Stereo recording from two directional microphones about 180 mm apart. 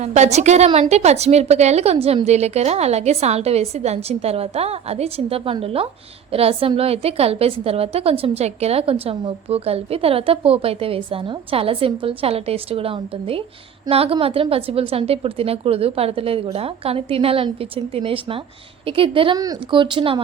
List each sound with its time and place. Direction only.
0.0 s a woman's voice: 40° right (ahead or behind)